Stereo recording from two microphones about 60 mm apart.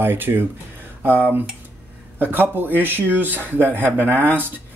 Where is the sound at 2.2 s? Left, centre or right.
Right.